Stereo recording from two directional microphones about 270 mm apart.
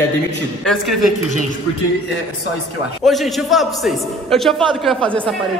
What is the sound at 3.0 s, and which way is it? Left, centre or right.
Speech, centre.